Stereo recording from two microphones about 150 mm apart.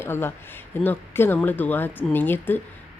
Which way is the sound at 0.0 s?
15° left (ahead or behind).